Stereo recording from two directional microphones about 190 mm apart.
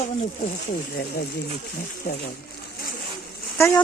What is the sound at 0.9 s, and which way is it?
Speech, 55° left (ahead or behind).